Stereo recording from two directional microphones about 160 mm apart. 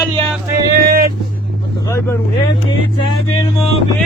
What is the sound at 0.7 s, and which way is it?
Vehicle, 65° right (ahead or behind).